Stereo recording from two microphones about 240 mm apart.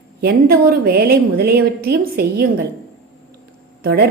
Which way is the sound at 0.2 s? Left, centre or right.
Right.